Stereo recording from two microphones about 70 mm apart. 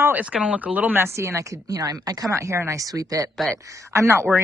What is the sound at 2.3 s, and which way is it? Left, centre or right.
Speech, right.